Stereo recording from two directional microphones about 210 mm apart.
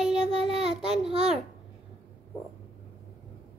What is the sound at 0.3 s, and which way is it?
Child singing, 30° right (ahead or behind).